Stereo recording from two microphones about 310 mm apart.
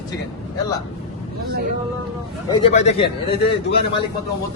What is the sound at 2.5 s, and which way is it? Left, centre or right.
Speech, centre.